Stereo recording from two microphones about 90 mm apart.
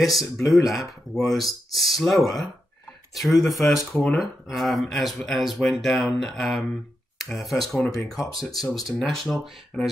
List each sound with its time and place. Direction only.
0.2 s speech: 35° left (ahead or behind)
0.7 s speech: centre (ahead or behind)